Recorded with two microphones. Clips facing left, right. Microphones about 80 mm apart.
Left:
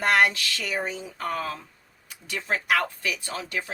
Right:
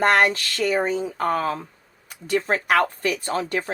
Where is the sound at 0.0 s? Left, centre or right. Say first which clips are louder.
Right 3 dB; right.